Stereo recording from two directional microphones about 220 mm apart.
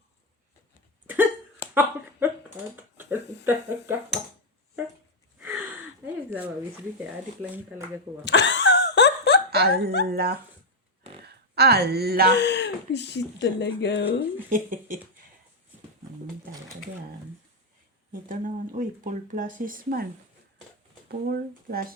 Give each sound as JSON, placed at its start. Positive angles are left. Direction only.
{"t": 1.0, "sound": "hiccup", "side_deg": -10}
{"t": 1.7, "sound": "speech", "side_deg": -10}
{"t": 2.7, "sound": "mechanisms", "side_deg": -10}
{"t": 3.4, "sound": "speech", "side_deg": -10}
{"t": 5.4, "sound": "a sound", "side_deg": -10}
{"t": 8.2, "sound": "a sound", "side_deg": 55}
{"t": 9.5, "sound": "a woman's voice", "side_deg": -45}
{"t": 12.3, "sound": "speech", "side_deg": 50}
{"t": 14.5, "sound": "speech", "side_deg": -35}
{"t": 18.1, "sound": "speech", "side_deg": -40}
{"t": 21.1, "sound": "speech", "side_deg": -45}